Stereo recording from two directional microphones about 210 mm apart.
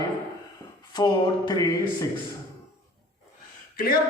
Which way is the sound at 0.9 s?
20° left (ahead or behind).